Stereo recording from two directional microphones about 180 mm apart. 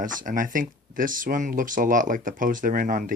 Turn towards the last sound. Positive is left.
turn(degrees=-50)  # may be behind; listen again after turning